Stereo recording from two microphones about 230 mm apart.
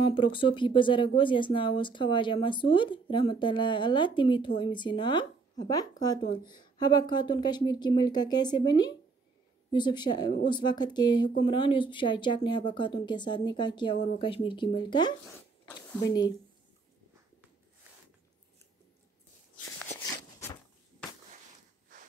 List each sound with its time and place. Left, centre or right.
0.0 s speech: left